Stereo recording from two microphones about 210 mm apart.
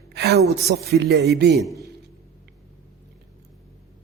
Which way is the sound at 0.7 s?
50° right (ahead or behind).